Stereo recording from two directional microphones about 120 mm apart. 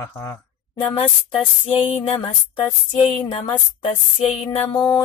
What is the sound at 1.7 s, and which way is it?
Mantra, 45° left (ahead or behind).